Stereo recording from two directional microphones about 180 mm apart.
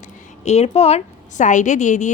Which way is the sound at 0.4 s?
35° left (ahead or behind).